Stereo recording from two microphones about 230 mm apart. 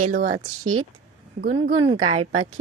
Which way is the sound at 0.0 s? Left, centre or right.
Right.